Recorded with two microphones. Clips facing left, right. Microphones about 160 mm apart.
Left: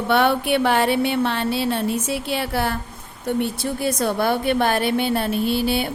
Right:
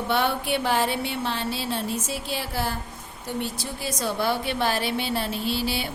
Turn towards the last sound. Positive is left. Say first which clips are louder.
# left 7 dB
turn(degrees=55)  # may be behind; listen again after turning